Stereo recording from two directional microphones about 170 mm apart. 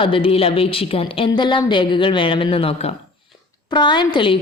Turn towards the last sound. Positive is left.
turn(degrees=30)  # may be behind; listen again after turning